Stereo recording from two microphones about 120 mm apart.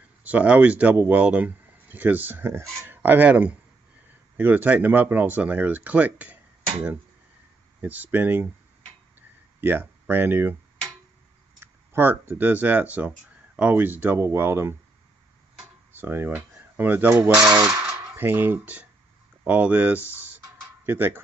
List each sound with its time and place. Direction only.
0.2 s a man's voice: 10° right (ahead or behind)
9.6 s speech: 15° right (ahead or behind)
11.6 s speech: 20° right (ahead or behind)
15.9 s a man's voice: 15° right (ahead or behind)
20.1 s music: 15° right (ahead or behind)